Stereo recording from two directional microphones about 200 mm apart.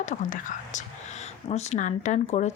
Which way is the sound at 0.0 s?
35° left (ahead or behind).